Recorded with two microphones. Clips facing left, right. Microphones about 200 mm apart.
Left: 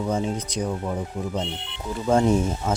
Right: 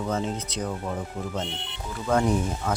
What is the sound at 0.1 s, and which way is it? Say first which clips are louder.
Speech: left 3 dB; 15° left (ahead or behind).